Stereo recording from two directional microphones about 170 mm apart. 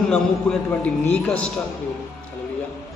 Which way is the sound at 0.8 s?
5° left (ahead or behind).